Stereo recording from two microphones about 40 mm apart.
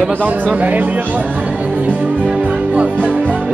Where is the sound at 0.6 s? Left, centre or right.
Right.